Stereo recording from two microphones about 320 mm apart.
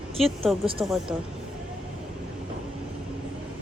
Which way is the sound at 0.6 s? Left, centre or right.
Centre.